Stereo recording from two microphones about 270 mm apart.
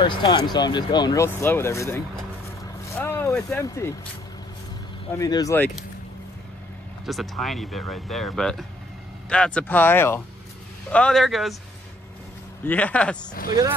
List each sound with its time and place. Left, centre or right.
0.0 s speech: centre
2.8 s vehicle: centre
5.1 s speech: centre
7.1 s speech: centre
12.6 s speech: centre
13.3 s speech: left